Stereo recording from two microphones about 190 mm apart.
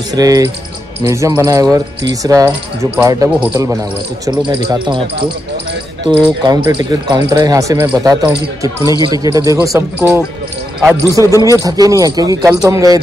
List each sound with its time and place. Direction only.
0.1 s speech: 20° right (ahead or behind)
4.3 s speech: 20° right (ahead or behind)
6.0 s speech: 20° right (ahead or behind)